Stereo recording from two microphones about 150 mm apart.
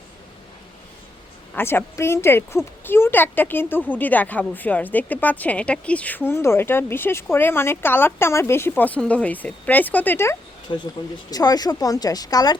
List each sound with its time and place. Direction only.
1.5 s a woman's voice: 15° left (ahead or behind)
10.7 s speech: 30° left (ahead or behind)